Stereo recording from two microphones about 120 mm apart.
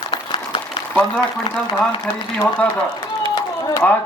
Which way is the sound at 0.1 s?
45° left (ahead or behind).